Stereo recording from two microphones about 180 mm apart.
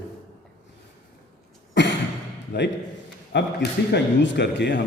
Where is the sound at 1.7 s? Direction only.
75° left (ahead or behind).